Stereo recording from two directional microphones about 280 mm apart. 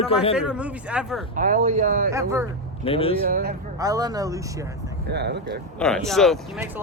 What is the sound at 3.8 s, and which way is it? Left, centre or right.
Speech, centre.